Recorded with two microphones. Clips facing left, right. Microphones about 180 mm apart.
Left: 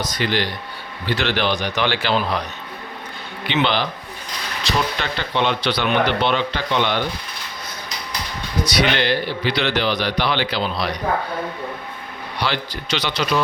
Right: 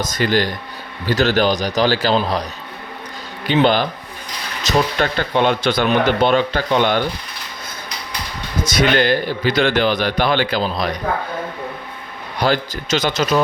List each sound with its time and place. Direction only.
0.0 s a man's voice: 45° right (ahead or behind)
3.4 s a man's voice: 40° right (ahead or behind)
8.6 s speech: 45° right (ahead or behind)
12.4 s speech: 45° right (ahead or behind)